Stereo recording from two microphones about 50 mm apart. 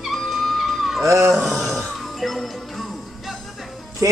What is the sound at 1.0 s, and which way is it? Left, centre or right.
Speech, right.